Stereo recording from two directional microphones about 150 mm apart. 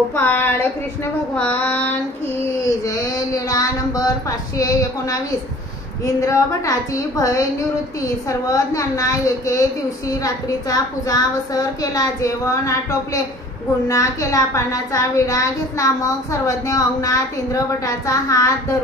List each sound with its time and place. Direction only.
0.1 s speech: 15° left (ahead or behind)
1.3 s female singing: 10° left (ahead or behind)
2.8 s a sound: 20° left (ahead or behind)
4.6 s speech: 20° left (ahead or behind)
6.2 s speech: 25° left (ahead or behind)